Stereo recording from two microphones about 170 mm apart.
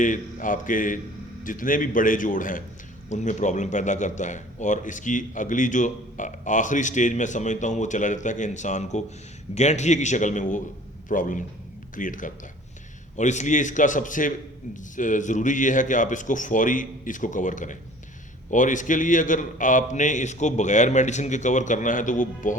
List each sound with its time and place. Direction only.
0.0 s a man's voice: 50° left (ahead or behind)